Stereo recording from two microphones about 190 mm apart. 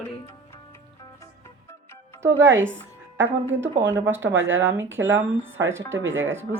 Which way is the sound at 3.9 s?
10° right (ahead or behind).